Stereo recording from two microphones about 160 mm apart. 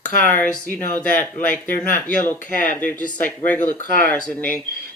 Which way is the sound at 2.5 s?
55° left (ahead or behind).